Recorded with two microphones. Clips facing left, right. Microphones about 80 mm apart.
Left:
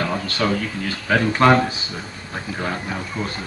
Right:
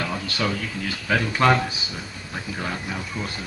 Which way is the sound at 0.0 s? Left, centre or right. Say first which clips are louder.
Left 4 dB; left.